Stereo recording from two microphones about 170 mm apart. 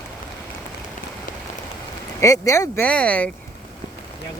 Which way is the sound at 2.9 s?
5° left (ahead or behind).